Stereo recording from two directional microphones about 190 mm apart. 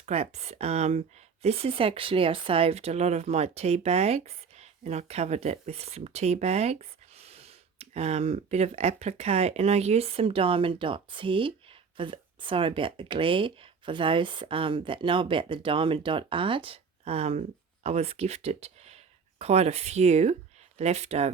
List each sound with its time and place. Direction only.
0.0 s speech: 35° right (ahead or behind)